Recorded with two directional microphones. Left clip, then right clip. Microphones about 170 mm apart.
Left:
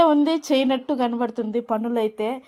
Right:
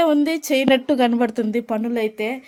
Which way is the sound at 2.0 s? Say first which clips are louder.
Right 1 dB; 5° left (ahead or behind).